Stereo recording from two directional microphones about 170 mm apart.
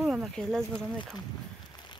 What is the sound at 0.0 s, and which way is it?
Speech, centre (ahead or behind).